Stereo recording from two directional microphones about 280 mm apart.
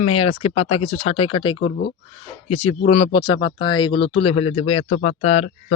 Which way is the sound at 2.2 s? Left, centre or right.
Left.